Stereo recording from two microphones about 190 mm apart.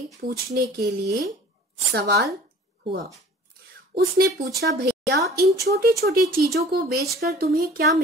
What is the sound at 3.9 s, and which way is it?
Speech, 55° right (ahead or behind).